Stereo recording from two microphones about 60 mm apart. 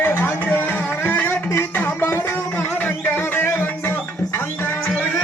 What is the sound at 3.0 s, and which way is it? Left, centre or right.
Music, left.